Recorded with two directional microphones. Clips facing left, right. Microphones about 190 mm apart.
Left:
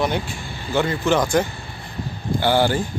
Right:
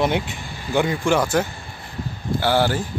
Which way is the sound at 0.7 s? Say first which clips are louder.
Even; 10° right (ahead or behind).